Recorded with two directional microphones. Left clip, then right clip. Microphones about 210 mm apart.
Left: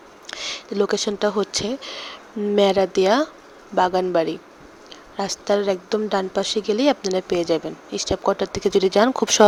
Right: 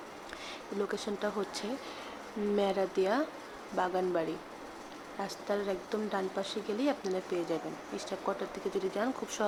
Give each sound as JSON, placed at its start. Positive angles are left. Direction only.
{"t": 0.3, "sound": "a woman's voice", "side_deg": 40}